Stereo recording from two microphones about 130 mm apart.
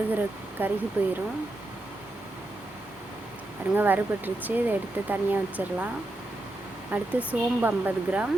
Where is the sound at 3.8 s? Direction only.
15° right (ahead or behind).